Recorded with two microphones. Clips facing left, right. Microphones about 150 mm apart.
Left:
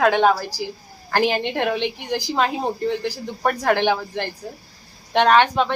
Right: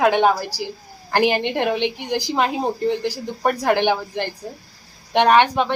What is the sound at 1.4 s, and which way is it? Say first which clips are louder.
Speech: right 2 dB; 15° right (ahead or behind).